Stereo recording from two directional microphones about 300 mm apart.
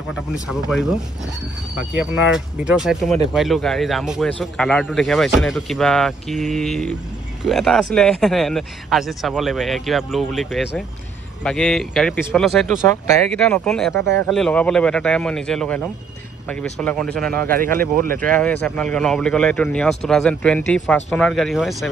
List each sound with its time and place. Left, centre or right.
0.1 s a man's voice: centre
18.0 s speech: right
18.3 s a man's voice: centre